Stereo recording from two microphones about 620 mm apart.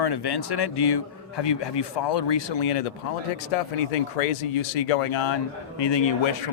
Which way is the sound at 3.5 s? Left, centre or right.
Left.